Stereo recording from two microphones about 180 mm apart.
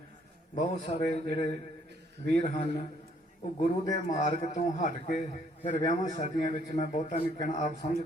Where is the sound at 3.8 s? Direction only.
20° left (ahead or behind).